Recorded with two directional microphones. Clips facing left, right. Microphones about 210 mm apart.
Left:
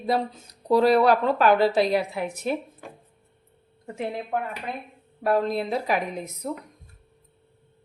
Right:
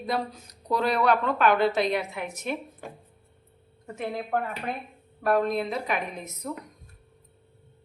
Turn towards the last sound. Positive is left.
turn(degrees=30)  # may be behind; listen again after turning